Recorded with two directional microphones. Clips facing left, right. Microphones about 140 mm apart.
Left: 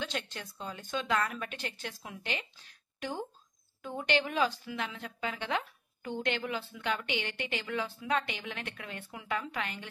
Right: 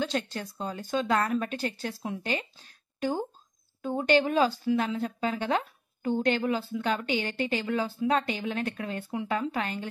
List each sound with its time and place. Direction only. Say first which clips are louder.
0.0 s a woman's voice: right 7 dB; 40° right (ahead or behind)